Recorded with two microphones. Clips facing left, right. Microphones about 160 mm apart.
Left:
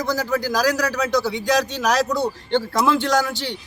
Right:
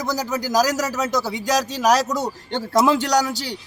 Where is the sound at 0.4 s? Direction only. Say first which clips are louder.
Right 3 dB; 40° right (ahead or behind).